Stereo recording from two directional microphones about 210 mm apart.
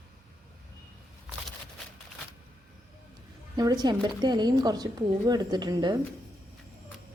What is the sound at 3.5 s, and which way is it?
Speech, 20° right (ahead or behind).